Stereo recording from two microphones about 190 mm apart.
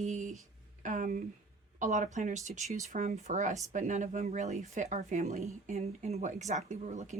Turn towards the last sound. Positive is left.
turn(degrees=-40)  # may be behind; listen again after turning